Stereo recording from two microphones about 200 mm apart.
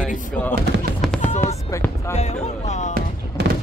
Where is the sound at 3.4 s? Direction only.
55° right (ahead or behind).